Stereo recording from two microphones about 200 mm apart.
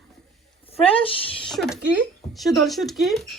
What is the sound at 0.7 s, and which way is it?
Speech, 30° left (ahead or behind).